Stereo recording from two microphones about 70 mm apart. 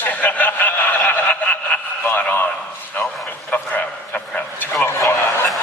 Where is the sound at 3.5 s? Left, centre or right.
Left.